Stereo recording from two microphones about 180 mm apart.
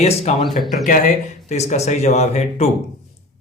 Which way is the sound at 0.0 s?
35° left (ahead or behind).